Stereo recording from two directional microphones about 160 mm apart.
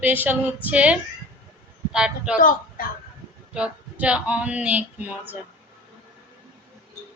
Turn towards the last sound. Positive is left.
turn(degrees=-10)  # may be behind; listen again after turning